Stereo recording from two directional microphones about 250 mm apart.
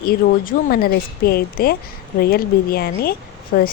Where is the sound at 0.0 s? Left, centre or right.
Left.